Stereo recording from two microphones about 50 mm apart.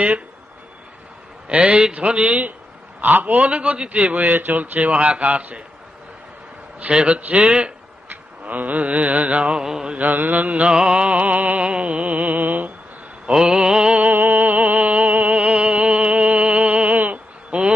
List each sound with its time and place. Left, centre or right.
1.5 s music: right
3.0 s music: right
6.9 s music: right
8.1 s mantra: right; by 9.9 s centre
9.9 s music: right
13.3 s a sound: centre
14.1 s music: right
17.5 s a sound: right